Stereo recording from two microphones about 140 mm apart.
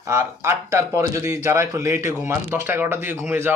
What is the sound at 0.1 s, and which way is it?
Speech, 20° right (ahead or behind).